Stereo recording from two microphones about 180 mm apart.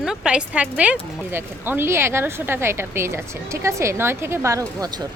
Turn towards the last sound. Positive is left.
turn(degrees=-20)  # may be behind; listen again after turning